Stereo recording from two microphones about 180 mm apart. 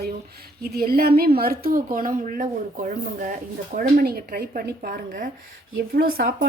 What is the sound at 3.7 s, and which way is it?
Speech, 55° right (ahead or behind).